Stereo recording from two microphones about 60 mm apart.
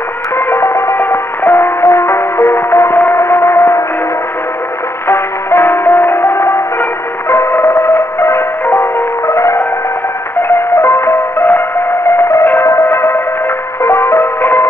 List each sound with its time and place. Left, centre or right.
0.5 s music: left
3.2 s gong: left
5.0 s music: left
9.3 s music: left
12.1 s music: left